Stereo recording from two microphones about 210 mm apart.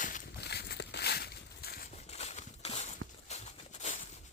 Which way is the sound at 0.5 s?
55° left (ahead or behind).